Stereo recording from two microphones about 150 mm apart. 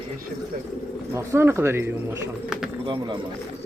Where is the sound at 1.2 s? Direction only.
15° right (ahead or behind).